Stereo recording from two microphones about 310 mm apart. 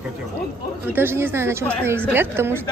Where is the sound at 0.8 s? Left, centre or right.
Centre.